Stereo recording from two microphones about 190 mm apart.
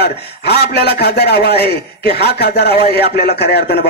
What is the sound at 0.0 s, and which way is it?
Speech, 60° left (ahead or behind).